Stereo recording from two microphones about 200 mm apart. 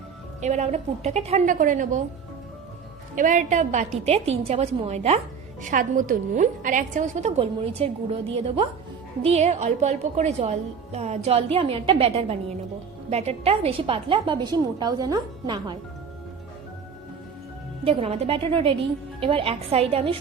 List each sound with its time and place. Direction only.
0.4 s a woman's voice: 35° right (ahead or behind)
3.2 s a woman's voice: 40° right (ahead or behind); by 15.8 s 20° right (ahead or behind)
17.8 s a woman's voice: 30° right (ahead or behind)